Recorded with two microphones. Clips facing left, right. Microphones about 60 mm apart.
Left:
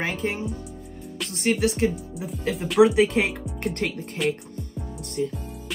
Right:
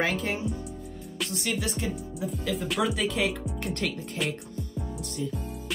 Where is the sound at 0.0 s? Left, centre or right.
Left.